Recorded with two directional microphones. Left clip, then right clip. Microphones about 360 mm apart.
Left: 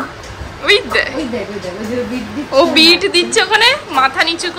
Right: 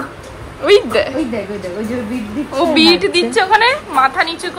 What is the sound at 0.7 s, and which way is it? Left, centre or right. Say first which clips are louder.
Speech: right 1 dB; centre.